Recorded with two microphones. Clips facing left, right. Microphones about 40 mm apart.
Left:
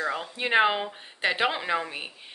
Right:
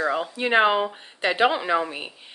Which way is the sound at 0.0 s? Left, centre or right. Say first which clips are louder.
Right 5 dB; centre.